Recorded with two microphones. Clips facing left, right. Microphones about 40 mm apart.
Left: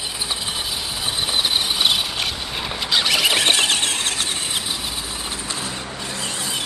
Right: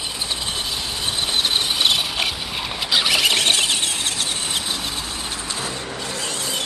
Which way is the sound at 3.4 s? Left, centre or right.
Left.